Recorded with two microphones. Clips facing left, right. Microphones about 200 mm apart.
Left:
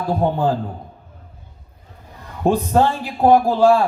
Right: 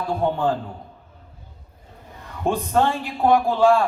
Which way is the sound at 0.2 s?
35° left (ahead or behind).